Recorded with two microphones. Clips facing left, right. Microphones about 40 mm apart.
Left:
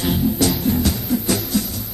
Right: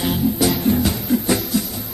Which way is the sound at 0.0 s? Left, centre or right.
Centre.